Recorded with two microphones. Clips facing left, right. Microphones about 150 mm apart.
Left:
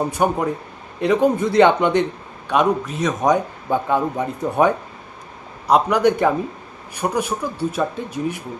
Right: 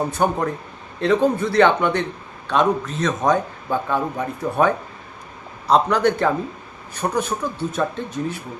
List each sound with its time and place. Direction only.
0.0 s a man's voice: 10° left (ahead or behind)